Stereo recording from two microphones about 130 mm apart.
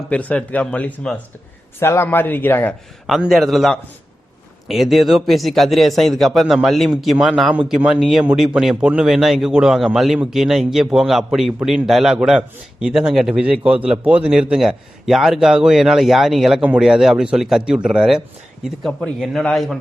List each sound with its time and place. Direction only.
0.1 s speech: 10° left (ahead or behind)
3.1 s a man's voice: centre (ahead or behind)